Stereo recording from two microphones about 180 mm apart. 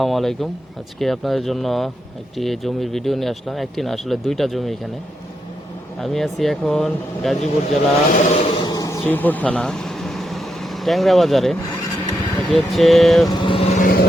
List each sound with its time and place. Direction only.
0.0 s speech: centre (ahead or behind)
6.0 s speech: centre (ahead or behind)
8.1 s chant: 40° left (ahead or behind)
8.5 s vehicle: 20° left (ahead or behind); by 11.5 s centre (ahead or behind)
12.5 s speech: centre (ahead or behind)
13.3 s vehicle: 30° left (ahead or behind)
13.8 s vehicle: 55° left (ahead or behind)